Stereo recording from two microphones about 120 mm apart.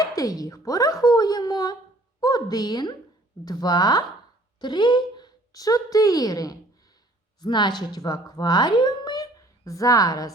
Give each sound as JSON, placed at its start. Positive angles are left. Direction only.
{"t": 0.0, "sound": "a woman's voice", "side_deg": 30}